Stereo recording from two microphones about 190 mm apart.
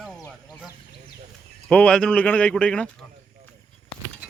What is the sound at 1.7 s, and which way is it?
Speech, 5° left (ahead or behind).